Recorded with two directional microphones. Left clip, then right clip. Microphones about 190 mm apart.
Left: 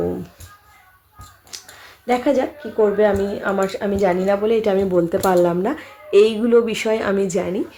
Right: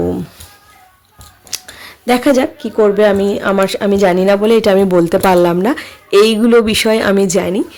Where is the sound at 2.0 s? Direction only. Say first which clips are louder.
Right 6 dB; 70° right (ahead or behind).